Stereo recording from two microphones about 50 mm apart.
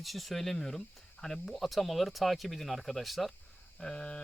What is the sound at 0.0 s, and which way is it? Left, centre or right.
Speech, centre.